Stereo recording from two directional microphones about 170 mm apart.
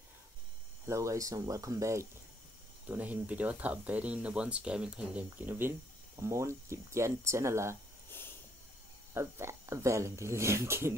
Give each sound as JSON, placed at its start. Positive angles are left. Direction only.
{"t": 0.8, "sound": "speech", "side_deg": -20}
{"t": 9.1, "sound": "speech", "side_deg": -15}